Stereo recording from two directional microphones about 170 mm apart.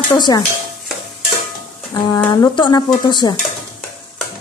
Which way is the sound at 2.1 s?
20° left (ahead or behind).